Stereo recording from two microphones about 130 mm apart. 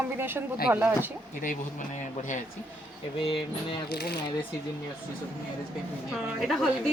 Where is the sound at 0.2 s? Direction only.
15° right (ahead or behind).